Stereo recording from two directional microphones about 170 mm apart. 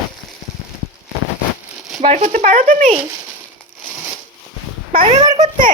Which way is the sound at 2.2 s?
45° right (ahead or behind).